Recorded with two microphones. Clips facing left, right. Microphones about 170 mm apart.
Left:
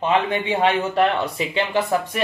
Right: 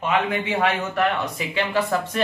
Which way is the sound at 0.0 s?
30° left (ahead or behind).